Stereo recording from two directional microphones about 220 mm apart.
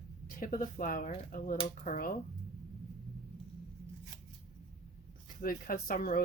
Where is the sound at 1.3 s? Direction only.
35° left (ahead or behind).